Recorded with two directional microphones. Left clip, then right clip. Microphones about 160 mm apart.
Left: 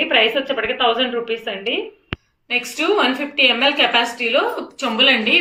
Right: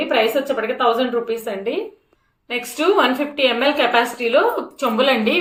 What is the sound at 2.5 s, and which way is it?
A woman's voice, 45° right (ahead or behind).